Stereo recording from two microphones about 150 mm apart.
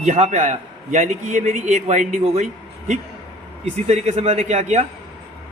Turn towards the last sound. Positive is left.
turn(degrees=-50)  # may be behind; listen again after turning